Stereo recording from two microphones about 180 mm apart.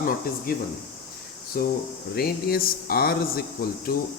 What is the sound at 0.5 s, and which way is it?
Speech, 55° left (ahead or behind).